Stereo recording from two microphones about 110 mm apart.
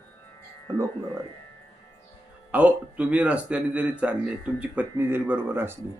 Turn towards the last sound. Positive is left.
turn(degrees=-20)  # may be behind; listen again after turning